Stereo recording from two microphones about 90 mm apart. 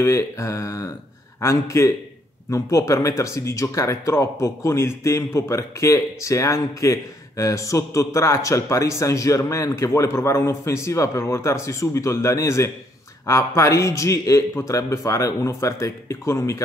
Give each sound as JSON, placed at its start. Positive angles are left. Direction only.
{"t": 0.0, "sound": "speech", "side_deg": 35}